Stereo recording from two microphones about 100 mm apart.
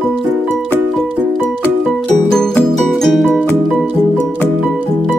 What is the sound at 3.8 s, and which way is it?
Music, 15° right (ahead or behind).